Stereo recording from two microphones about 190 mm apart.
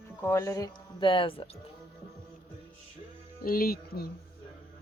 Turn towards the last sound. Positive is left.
turn(degrees=50)  # may be behind; listen again after turning